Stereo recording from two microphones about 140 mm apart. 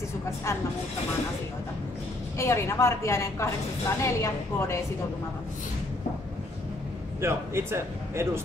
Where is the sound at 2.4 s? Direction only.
20° left (ahead or behind).